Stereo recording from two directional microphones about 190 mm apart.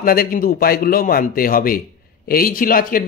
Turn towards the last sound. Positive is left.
turn(degrees=50)  # may be behind; listen again after turning